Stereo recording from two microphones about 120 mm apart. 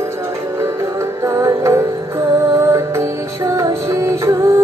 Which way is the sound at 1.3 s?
30° right (ahead or behind).